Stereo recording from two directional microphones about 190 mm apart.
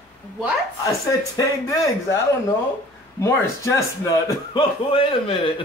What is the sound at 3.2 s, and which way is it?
Speech, 15° left (ahead or behind).